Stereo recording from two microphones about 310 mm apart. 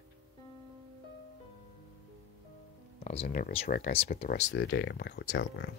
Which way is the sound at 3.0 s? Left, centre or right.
Centre.